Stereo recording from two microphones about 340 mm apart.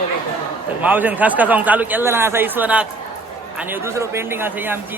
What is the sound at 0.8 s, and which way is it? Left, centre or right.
Speech, centre.